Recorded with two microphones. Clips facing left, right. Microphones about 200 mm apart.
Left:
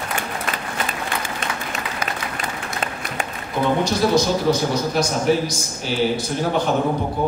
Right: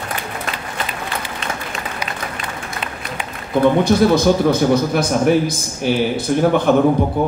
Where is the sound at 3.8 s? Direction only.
55° right (ahead or behind).